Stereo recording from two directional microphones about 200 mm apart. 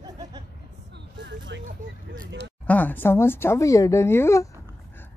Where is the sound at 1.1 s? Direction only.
65° right (ahead or behind).